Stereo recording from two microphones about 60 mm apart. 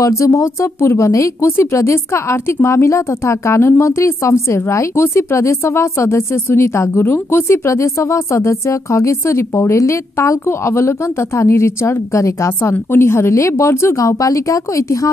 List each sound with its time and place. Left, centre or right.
0.0 s speech: left
12.7 s speech: left